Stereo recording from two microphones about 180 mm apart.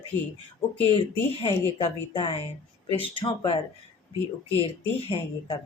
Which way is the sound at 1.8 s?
30° left (ahead or behind).